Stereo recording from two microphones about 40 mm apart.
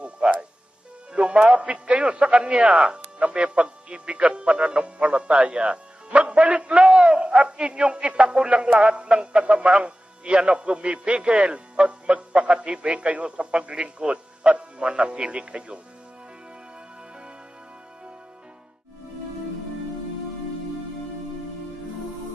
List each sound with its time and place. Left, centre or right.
0.0 s music: right
1.1 s a man's voice: right